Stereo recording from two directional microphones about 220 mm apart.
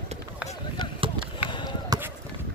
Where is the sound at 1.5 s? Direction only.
20° left (ahead or behind).